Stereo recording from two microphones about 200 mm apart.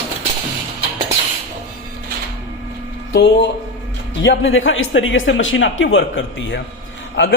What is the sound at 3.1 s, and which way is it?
Speech, 60° left (ahead or behind).